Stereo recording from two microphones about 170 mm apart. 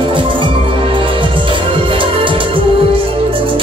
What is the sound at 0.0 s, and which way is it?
Music, 30° right (ahead or behind).